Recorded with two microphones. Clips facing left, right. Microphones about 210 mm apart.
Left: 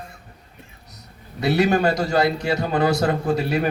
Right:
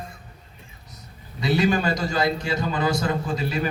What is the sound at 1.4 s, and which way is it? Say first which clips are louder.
A man's voice: left 3 dB; 60° left (ahead or behind).